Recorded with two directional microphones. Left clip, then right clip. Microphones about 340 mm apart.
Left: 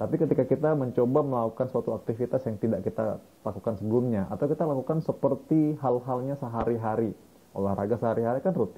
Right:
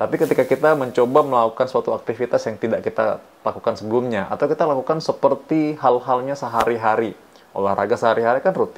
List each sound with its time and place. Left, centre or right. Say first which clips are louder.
0.0 s speech: right 8 dB; centre